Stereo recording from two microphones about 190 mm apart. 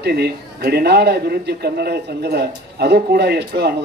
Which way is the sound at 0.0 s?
60° right (ahead or behind).